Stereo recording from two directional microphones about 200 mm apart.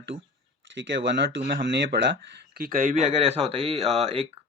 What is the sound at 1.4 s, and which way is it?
Speech, 45° right (ahead or behind).